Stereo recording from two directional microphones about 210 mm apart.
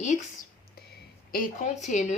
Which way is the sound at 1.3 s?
40° left (ahead or behind).